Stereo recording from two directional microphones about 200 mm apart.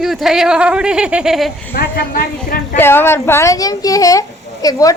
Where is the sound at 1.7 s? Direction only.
50° left (ahead or behind).